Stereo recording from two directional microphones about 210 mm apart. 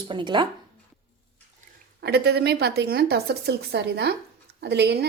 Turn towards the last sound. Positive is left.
turn(degrees=-55)  # may be behind; listen again after turning